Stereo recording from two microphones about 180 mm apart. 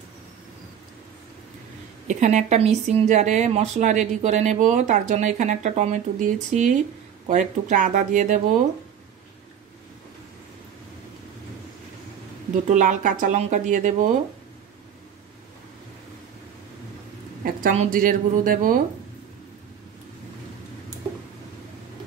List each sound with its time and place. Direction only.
2.0 s speech: 40° right (ahead or behind)
12.6 s speech: 45° right (ahead or behind)
17.5 s speech: 50° right (ahead or behind)